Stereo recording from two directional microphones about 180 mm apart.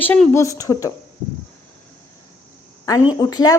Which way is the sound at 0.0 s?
10° left (ahead or behind).